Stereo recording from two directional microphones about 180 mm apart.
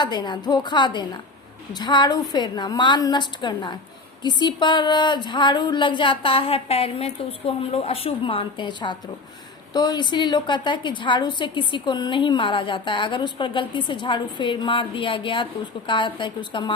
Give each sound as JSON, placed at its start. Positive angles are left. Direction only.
{"t": 0.0, "sound": "a woman's voice", "side_deg": 25}